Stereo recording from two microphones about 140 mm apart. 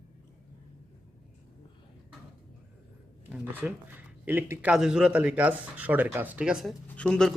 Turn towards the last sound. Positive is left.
turn(degrees=5)  # may be behind; listen again after turning